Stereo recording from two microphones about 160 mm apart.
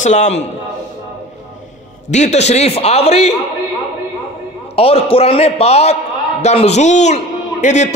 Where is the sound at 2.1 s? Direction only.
45° left (ahead or behind).